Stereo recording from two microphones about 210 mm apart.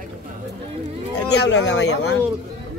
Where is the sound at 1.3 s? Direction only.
55° left (ahead or behind).